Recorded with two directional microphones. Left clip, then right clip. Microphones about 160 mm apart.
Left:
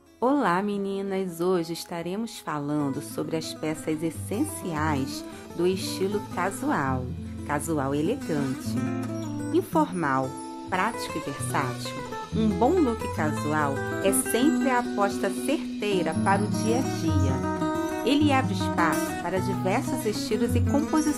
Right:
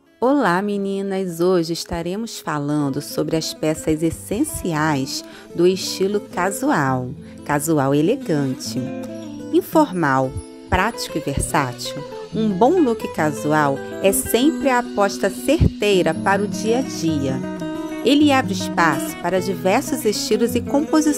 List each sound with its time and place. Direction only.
0.2 s speech: 30° right (ahead or behind)
9.5 s speech: 30° right (ahead or behind)